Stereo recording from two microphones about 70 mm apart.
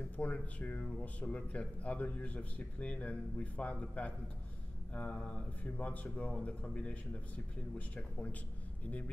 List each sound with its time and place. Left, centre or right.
0.2 s a man's voice: left